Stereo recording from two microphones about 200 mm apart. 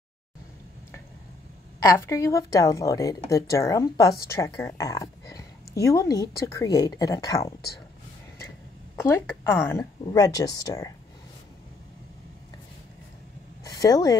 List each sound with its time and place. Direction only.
1.8 s speech: 15° left (ahead or behind)
8.9 s speech: 10° left (ahead or behind)
13.7 s speech: 20° left (ahead or behind)